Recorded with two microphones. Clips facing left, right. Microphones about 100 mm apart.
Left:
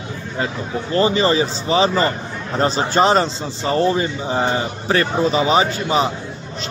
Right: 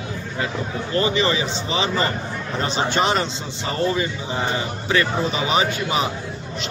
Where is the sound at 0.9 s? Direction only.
35° left (ahead or behind).